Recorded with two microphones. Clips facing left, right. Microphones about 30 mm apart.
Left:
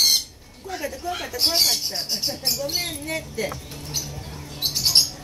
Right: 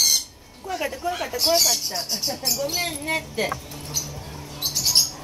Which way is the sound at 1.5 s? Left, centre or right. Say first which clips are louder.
Even; left.